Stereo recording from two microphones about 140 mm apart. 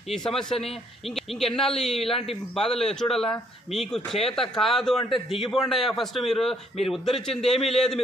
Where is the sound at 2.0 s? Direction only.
45° left (ahead or behind).